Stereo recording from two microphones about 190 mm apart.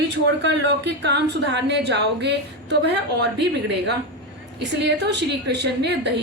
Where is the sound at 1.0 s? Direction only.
65° right (ahead or behind).